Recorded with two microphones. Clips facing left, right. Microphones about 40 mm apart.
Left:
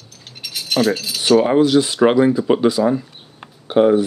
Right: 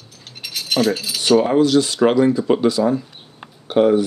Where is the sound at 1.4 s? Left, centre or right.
Centre.